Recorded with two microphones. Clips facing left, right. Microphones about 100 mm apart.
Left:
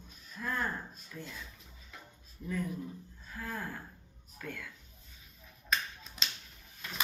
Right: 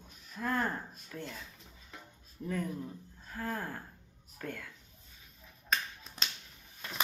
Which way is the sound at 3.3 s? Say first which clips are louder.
Right 3 dB; 40° right (ahead or behind).